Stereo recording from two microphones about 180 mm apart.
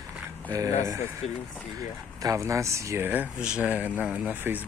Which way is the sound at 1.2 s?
40° left (ahead or behind).